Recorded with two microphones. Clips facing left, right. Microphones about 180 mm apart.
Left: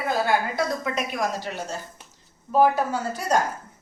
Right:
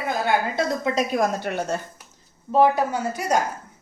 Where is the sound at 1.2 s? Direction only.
60° right (ahead or behind).